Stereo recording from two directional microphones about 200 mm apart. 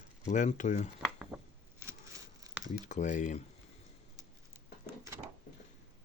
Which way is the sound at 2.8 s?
40° left (ahead or behind).